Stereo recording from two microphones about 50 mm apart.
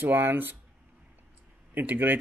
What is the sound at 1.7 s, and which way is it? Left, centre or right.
Speech, right.